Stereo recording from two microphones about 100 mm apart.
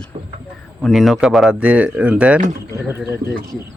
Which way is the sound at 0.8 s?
Centre (ahead or behind).